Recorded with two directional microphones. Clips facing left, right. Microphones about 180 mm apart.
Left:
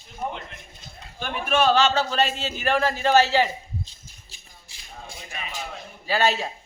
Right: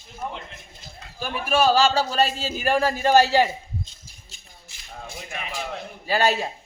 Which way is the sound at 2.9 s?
45° right (ahead or behind).